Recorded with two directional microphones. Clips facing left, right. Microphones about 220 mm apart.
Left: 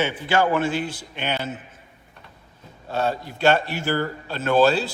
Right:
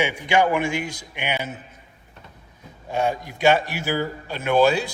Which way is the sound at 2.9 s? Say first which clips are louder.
Right 1 dB; 15° right (ahead or behind).